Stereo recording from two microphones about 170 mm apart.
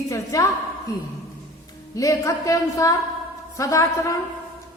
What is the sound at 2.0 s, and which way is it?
A woman's voice, 20° left (ahead or behind).